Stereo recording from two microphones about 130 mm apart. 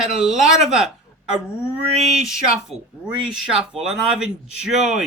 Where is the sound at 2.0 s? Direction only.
5° right (ahead or behind).